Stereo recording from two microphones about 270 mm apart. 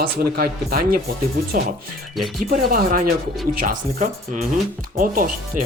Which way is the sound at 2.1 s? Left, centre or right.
Centre.